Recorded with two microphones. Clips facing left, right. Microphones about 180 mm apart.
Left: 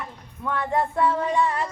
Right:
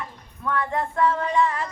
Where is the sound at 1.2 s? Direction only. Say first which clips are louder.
Even; 30° left (ahead or behind).